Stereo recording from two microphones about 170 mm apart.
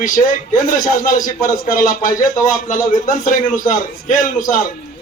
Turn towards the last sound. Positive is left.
turn(degrees=50)  # may be behind; listen again after turning